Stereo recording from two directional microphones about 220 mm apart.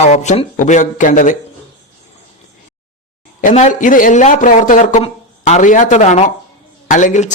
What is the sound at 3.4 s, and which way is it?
A man's voice, 35° left (ahead or behind).